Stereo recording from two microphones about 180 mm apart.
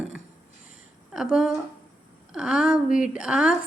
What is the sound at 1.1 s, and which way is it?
Speech, 5° right (ahead or behind).